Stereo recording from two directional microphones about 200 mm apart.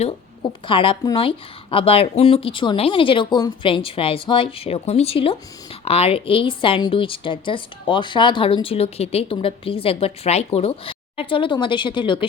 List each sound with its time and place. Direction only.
0.7 s a woman's voice: 25° left (ahead or behind)